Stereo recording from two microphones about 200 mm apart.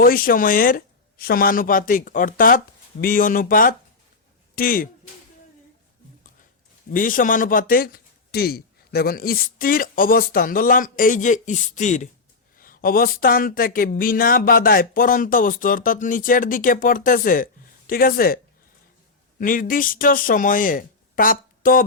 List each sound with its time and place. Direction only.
0.0 s speech: 45° left (ahead or behind)
6.9 s speech: 40° left (ahead or behind)
19.4 s speech: 45° left (ahead or behind)